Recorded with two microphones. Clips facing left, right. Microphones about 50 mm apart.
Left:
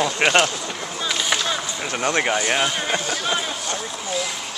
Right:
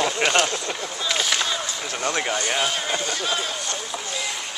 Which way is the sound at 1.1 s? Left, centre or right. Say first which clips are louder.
Left 1 dB; centre.